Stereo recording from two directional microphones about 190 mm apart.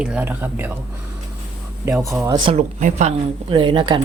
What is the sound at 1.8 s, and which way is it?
A woman's voice, 15° right (ahead or behind).